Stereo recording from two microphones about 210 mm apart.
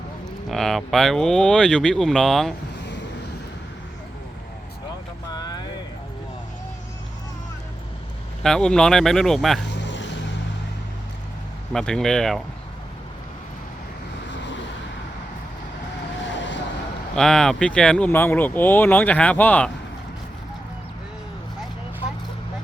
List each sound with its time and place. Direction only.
0.4 s speech: centre (ahead or behind)
5.3 s vehicle: 20° left (ahead or behind)
8.4 s speech: 5° left (ahead or behind)
9.6 s vehicle: 55° left (ahead or behind)
11.7 s speech: 5° left (ahead or behind)
16.3 s vehicle: 60° left (ahead or behind)
17.2 s speech: centre (ahead or behind)